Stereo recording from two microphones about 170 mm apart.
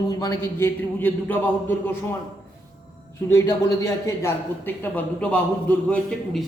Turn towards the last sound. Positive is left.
turn(degrees=0)  # may be behind; listen again after turning